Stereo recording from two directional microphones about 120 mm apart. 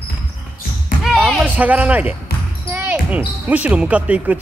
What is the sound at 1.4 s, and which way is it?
Speech, 15° right (ahead or behind).